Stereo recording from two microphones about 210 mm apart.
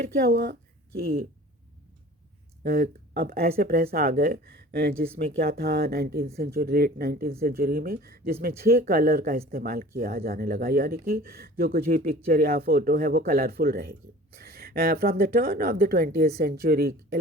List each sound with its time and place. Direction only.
0.3 s speech: 50° right (ahead or behind)
2.6 s speech: 45° right (ahead or behind)